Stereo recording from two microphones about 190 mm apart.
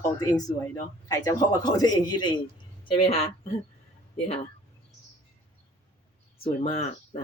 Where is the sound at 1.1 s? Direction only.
20° left (ahead or behind).